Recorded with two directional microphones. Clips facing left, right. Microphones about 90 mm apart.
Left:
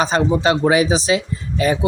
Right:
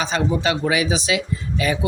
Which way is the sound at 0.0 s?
40° left (ahead or behind).